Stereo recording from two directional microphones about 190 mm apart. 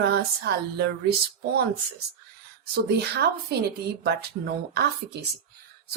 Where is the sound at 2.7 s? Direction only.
60° right (ahead or behind).